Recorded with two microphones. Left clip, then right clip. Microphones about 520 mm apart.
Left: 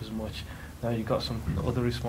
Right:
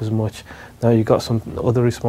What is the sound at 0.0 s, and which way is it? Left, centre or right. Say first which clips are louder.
Speech: right 12 dB; right.